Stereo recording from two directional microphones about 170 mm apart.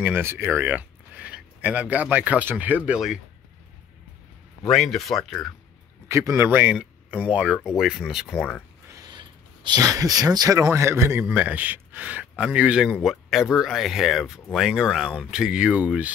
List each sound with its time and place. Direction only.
0.0 s speech: 15° right (ahead or behind)
4.6 s speech: centre (ahead or behind)
6.0 s speech: 15° right (ahead or behind)
8.9 s speech: 25° right (ahead or behind); by 16.1 s 5° right (ahead or behind)